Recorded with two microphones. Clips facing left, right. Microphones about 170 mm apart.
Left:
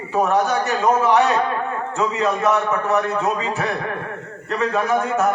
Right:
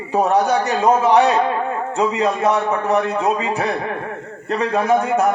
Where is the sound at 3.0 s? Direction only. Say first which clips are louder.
Right 2 dB; 20° right (ahead or behind).